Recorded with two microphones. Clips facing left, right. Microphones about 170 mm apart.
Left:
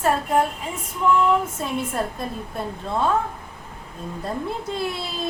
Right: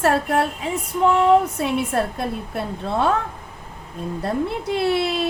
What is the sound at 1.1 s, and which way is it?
A woman's voice, 70° right (ahead or behind).